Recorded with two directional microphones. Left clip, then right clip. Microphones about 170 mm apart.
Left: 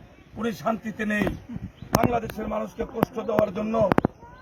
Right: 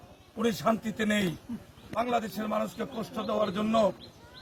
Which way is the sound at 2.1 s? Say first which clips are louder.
Left 2 dB; 25° left (ahead or behind).